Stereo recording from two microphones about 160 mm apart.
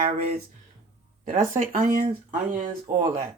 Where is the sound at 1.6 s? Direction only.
55° right (ahead or behind).